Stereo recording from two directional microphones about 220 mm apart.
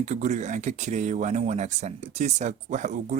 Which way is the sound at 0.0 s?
30° right (ahead or behind).